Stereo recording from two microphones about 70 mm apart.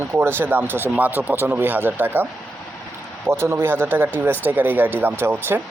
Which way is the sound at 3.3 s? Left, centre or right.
Right.